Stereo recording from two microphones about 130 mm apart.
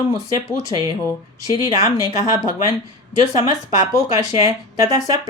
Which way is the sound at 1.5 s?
25° right (ahead or behind).